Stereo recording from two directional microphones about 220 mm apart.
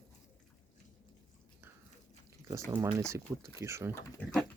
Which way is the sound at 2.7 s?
15° right (ahead or behind).